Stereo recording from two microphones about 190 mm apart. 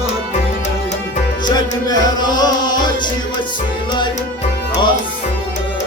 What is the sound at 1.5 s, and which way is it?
Music, 20° left (ahead or behind).